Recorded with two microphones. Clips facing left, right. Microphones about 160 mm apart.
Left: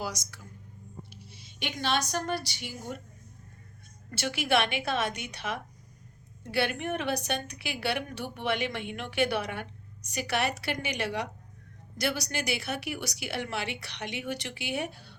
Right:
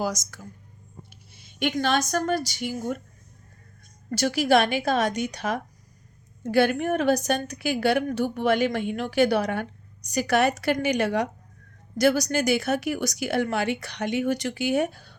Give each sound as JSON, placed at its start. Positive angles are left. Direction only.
{"t": 0.0, "sound": "a woman's voice", "side_deg": -45}
{"t": 4.1, "sound": "a woman's voice", "side_deg": -40}